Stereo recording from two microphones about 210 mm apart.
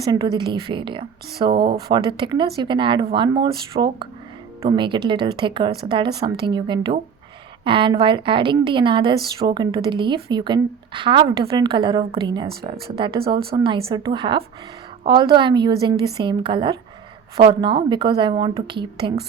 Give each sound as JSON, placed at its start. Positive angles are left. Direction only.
{"t": 0.1, "sound": "a woman's voice", "side_deg": -20}